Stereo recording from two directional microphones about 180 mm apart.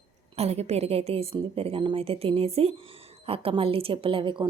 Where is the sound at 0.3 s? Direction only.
35° right (ahead or behind).